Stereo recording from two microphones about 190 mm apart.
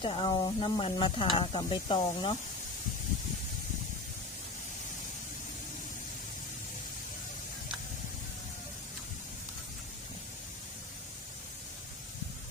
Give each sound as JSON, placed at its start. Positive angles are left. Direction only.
{"t": 0.0, "sound": "sizzle", "side_deg": 25}